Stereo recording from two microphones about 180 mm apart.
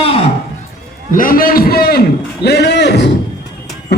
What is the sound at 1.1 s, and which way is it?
Speech, 50° left (ahead or behind).